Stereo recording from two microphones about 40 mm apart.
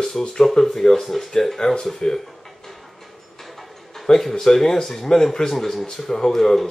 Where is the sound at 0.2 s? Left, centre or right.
Centre.